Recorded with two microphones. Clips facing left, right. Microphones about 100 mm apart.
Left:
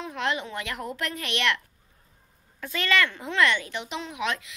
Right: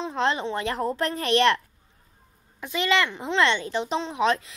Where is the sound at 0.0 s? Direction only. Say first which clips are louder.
Right 4 dB; 30° right (ahead or behind).